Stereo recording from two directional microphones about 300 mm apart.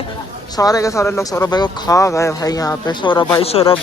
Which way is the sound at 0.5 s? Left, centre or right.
Centre.